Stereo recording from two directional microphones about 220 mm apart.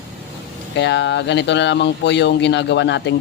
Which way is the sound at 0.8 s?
55° left (ahead or behind).